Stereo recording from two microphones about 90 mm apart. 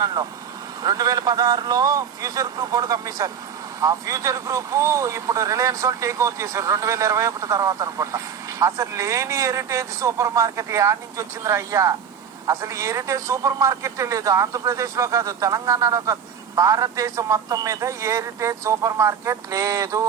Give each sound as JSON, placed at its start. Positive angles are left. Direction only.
{"t": 0.0, "sound": "speech", "side_deg": -45}